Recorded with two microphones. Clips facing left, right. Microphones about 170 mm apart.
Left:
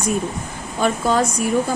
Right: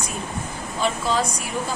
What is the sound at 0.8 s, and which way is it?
Speech, 50° left (ahead or behind).